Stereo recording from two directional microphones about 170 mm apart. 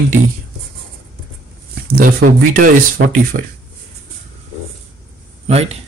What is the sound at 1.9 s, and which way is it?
Speech, 55° right (ahead or behind).